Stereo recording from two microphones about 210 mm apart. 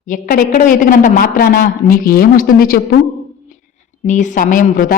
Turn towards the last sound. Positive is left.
turn(degrees=40)  # may be behind; listen again after turning